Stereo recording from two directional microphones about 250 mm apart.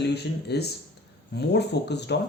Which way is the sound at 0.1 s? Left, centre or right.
Left.